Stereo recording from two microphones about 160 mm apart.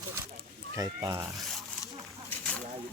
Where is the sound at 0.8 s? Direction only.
20° right (ahead or behind).